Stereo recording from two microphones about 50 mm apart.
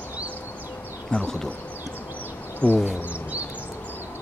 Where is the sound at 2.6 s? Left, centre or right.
Left.